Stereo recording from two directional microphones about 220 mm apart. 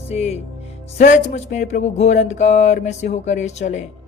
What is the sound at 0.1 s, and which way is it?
Speech, 30° left (ahead or behind).